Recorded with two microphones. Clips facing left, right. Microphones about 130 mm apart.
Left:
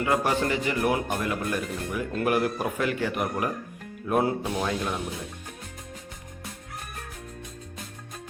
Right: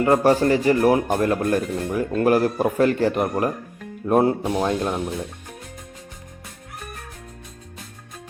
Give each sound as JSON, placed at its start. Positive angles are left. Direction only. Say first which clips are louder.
{"t": 0.0, "sound": "a man's voice", "louder": "right 8 dB", "side_deg": -35}